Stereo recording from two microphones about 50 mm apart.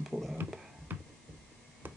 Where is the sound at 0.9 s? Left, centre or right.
Right.